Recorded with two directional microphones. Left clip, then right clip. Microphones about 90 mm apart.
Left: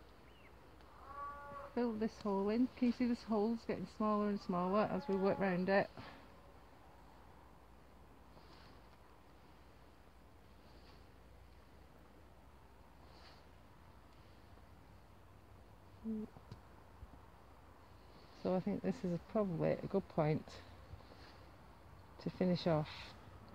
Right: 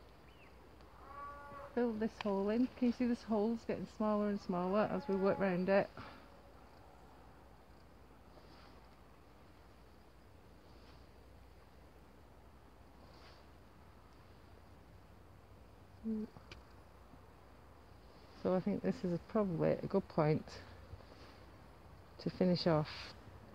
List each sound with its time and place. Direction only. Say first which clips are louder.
1.6 s speech: right 2 dB; centre (ahead or behind)
18.4 s speech: right 3 dB; 35° right (ahead or behind)
22.2 s speech: right 3 dB; 50° right (ahead or behind)